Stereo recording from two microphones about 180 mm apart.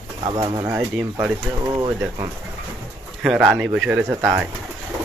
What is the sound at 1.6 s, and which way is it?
Speech, 25° right (ahead or behind).